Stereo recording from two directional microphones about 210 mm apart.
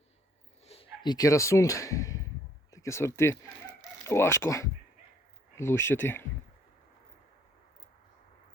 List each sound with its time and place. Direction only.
0.6 s speech: 30° left (ahead or behind); by 6.2 s 10° left (ahead or behind)